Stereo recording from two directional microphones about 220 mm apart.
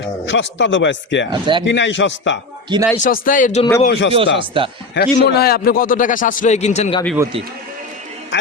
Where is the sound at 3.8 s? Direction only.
50° left (ahead or behind).